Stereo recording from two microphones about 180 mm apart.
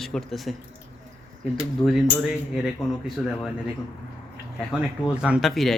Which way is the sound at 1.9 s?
Centre (ahead or behind).